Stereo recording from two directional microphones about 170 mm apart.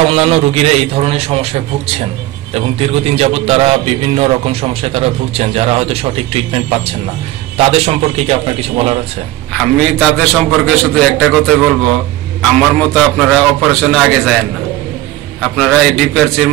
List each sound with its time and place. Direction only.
0.1 s a man's voice: 35° right (ahead or behind)
9.5 s a man's voice: 5° left (ahead or behind)
15.5 s a man's voice: 5° left (ahead or behind)